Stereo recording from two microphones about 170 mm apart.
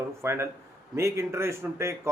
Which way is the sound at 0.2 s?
15° right (ahead or behind).